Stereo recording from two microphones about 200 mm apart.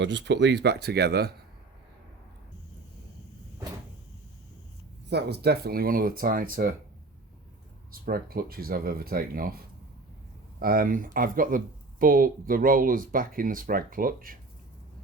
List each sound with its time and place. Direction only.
0.0 s speech: 60° right (ahead or behind)
5.0 s speech: 55° right (ahead or behind)
7.9 s speech: 45° right (ahead or behind)
10.6 s speech: 45° right (ahead or behind)